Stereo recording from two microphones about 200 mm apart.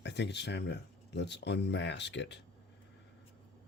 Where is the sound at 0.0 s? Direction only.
60° left (ahead or behind).